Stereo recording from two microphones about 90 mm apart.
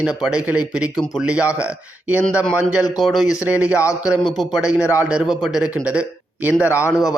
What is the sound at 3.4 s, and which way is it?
A man's voice, 15° right (ahead or behind).